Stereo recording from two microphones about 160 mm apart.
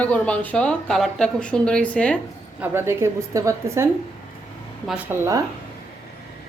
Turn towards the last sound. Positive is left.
turn(degrees=-20)  # may be behind; listen again after turning